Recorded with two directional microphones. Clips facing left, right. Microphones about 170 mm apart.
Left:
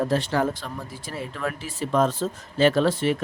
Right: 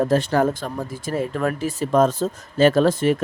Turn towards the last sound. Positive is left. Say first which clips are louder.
# right 4 dB
turn(degrees=-45)  # may be behind; listen again after turning